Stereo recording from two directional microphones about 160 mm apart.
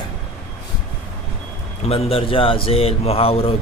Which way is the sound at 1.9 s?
35° left (ahead or behind).